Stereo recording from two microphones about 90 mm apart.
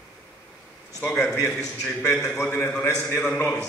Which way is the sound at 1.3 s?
35° left (ahead or behind).